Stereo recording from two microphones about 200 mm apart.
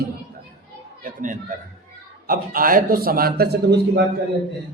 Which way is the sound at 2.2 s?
45° right (ahead or behind).